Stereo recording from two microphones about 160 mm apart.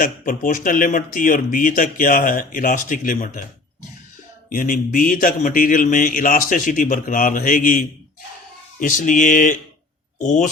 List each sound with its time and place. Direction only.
0.0 s speech: 60° left (ahead or behind)
4.4 s speech: 55° left (ahead or behind)